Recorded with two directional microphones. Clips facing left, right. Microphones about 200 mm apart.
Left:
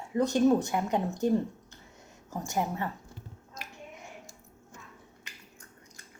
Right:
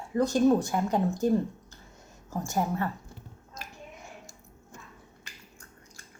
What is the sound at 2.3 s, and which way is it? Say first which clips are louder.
Speech: right 2 dB; 15° left (ahead or behind).